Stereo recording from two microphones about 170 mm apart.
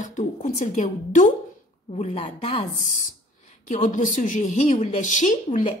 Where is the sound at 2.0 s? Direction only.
35° left (ahead or behind).